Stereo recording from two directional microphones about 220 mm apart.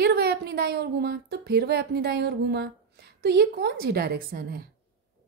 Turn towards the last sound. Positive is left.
turn(degrees=-45)  # may be behind; listen again after turning